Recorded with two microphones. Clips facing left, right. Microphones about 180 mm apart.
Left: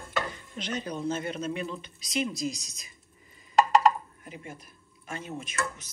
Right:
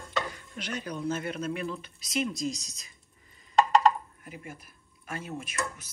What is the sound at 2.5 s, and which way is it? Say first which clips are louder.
Speech: right 3 dB; 35° right (ahead or behind).